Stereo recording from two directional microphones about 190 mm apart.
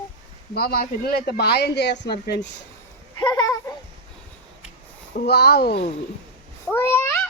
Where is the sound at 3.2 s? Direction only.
20° left (ahead or behind).